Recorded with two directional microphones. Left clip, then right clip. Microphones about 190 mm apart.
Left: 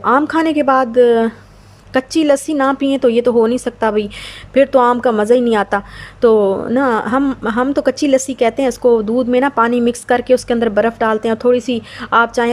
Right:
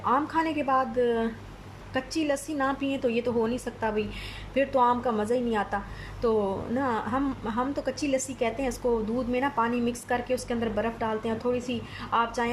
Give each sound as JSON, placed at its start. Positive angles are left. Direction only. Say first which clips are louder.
{"t": 0.0, "sound": "a woman's voice", "louder": "left 12 dB", "side_deg": 45}